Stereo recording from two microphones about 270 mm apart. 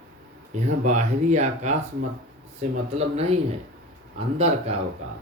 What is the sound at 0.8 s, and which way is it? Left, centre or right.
Mantra, right.